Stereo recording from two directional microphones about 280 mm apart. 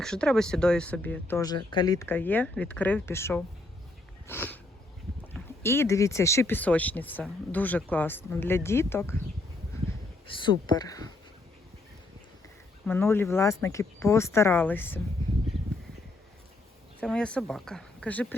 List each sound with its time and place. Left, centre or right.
0.0 s speech: centre
4.3 s a sound: centre
5.3 s speech: centre
10.2 s speech: centre
12.8 s speech: centre
17.0 s speech: centre